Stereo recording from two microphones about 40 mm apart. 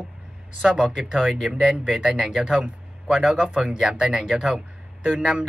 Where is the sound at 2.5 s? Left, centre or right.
Right.